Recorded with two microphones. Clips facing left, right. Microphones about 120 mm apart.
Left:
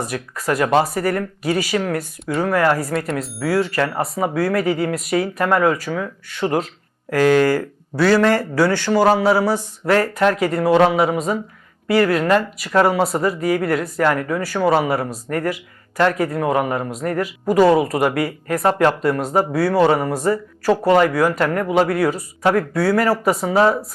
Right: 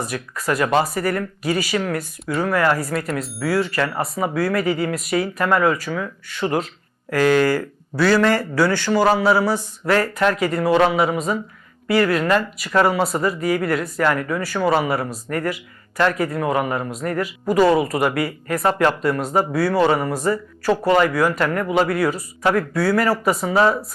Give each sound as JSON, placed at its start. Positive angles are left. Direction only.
{"t": 0.0, "sound": "speech", "side_deg": 55}
{"t": 0.8, "sound": "speech", "side_deg": 35}
{"t": 2.2, "sound": "speech", "side_deg": 40}
{"t": 3.4, "sound": "speech", "side_deg": 45}